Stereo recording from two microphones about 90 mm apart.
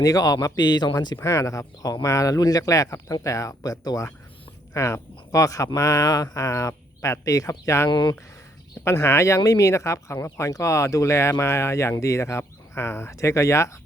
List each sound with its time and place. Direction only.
0.0 s speech: 40° left (ahead or behind)
7.9 s speech: 55° left (ahead or behind)
8.8 s speech: 30° left (ahead or behind)